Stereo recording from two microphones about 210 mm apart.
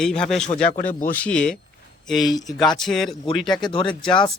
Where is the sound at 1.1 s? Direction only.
5° left (ahead or behind).